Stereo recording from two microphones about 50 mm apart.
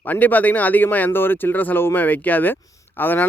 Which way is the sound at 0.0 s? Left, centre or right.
Left.